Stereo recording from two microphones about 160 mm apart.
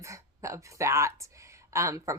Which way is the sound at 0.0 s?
20° right (ahead or behind).